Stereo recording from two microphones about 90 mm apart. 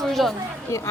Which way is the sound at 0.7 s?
35° left (ahead or behind).